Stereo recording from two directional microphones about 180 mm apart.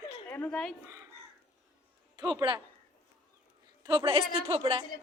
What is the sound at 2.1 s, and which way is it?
Speech, 25° right (ahead or behind).